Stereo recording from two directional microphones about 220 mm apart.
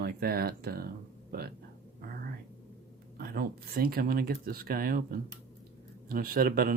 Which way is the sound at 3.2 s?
40° right (ahead or behind).